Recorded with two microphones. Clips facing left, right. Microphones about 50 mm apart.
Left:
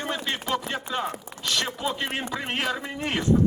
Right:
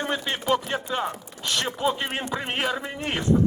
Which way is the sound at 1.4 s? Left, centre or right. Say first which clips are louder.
Right 3 dB; right.